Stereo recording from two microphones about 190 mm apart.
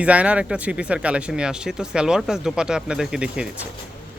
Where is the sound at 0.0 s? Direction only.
5° right (ahead or behind).